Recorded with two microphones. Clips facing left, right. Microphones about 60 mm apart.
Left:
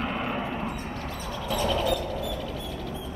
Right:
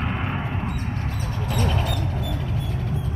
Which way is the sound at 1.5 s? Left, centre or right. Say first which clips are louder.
Left 1 dB; right.